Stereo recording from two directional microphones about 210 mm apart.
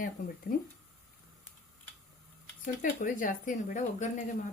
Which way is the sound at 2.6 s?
40° left (ahead or behind).